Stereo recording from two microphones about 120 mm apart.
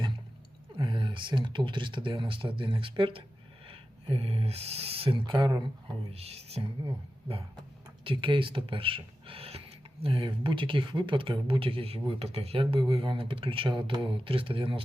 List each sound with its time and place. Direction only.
0.8 s speech: 45° right (ahead or behind)
6.1 s speech: 55° right (ahead or behind)